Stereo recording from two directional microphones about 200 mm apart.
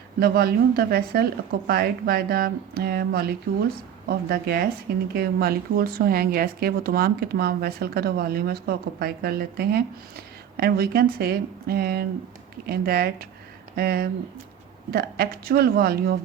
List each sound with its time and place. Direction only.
0.2 s speech: 50° right (ahead or behind)